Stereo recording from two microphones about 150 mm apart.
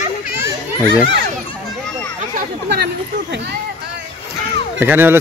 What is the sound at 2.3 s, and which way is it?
Chatter, 90° right.